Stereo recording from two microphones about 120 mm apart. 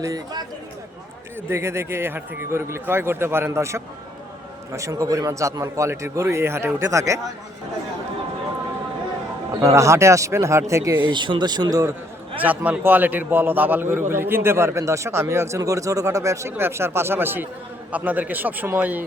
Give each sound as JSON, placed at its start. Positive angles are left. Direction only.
{"t": 0.0, "sound": "speech", "side_deg": -30}
{"t": 1.4, "sound": "a man's voice", "side_deg": -20}
{"t": 9.6, "sound": "a man's voice", "side_deg": -25}
{"t": 11.0, "sound": "speech", "side_deg": -40}
{"t": 12.4, "sound": "a man's voice", "side_deg": -15}